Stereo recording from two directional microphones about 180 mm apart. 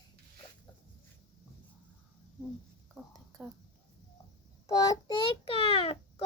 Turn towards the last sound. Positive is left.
turn(degrees=30)  # may be behind; listen again after turning